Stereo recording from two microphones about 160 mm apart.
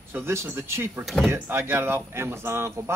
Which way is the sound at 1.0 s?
Centre (ahead or behind).